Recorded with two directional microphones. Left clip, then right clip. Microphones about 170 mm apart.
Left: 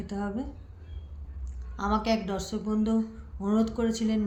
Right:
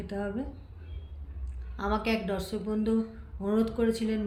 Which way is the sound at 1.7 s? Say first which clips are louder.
Left 2 dB; 90° left.